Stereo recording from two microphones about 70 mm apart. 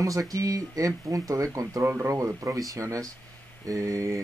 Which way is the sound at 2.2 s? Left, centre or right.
Right.